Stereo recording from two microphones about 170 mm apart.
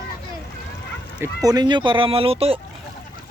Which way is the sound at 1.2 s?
20° right (ahead or behind).